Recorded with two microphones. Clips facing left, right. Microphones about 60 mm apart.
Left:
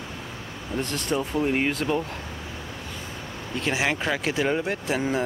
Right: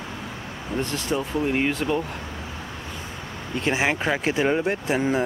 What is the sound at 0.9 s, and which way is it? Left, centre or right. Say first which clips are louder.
Speech: left 1 dB; centre.